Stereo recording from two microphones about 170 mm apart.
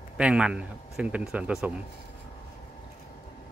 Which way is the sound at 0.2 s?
5° right (ahead or behind).